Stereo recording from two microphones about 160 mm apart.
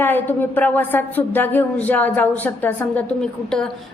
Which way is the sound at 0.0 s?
15° left (ahead or behind).